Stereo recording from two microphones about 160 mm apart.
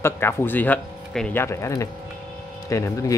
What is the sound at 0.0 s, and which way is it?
Speech, 15° left (ahead or behind).